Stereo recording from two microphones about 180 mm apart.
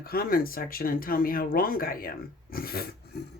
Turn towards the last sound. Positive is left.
turn(degrees=55)  # may be behind; listen again after turning